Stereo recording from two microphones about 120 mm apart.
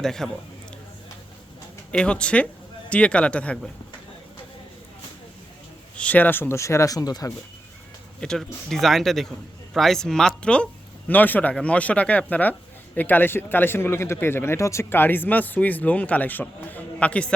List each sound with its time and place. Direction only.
0.0 s speech: 5° left (ahead or behind)
1.9 s speech: 10° left (ahead or behind)
6.0 s speech: 10° left (ahead or behind); by 7.3 s 30° left (ahead or behind)
8.2 s speech: 5° left (ahead or behind)